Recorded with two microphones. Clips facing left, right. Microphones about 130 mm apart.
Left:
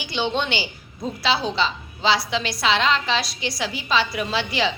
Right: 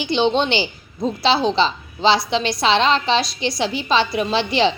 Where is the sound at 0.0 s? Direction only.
25° right (ahead or behind).